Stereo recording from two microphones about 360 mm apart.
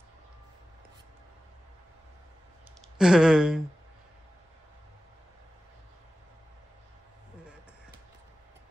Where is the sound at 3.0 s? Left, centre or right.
Centre.